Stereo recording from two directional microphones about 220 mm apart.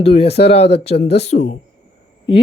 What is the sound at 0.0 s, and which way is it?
Speech, 25° left (ahead or behind).